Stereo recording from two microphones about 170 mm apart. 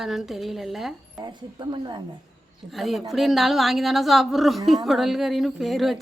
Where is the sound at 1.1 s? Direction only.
25° right (ahead or behind).